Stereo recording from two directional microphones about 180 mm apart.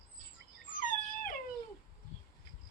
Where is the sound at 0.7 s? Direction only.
50° left (ahead or behind).